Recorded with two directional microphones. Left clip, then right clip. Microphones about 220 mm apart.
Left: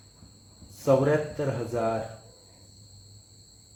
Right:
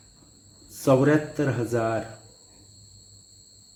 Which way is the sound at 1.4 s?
50° right (ahead or behind).